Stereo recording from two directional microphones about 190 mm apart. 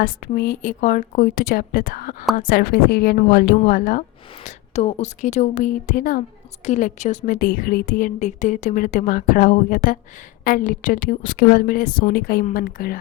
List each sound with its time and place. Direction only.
0.0 s a woman's voice: 50° left (ahead or behind)
4.4 s a woman's voice: 35° left (ahead or behind); by 13.0 s 50° left (ahead or behind)